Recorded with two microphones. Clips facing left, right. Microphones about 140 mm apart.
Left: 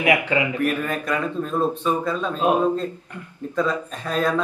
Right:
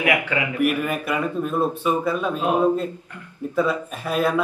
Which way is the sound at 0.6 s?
10° right (ahead or behind).